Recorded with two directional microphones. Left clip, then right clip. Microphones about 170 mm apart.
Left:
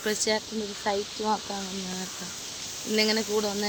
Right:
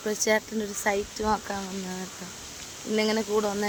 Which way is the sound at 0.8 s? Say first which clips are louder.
Right 2 dB; 35° right (ahead or behind).